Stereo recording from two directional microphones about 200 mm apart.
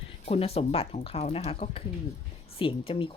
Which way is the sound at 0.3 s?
30° left (ahead or behind).